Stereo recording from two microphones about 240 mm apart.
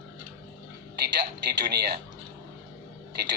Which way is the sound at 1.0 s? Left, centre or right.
Right.